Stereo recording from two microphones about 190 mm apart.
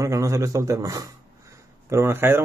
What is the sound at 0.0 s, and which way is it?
Speech, 15° right (ahead or behind).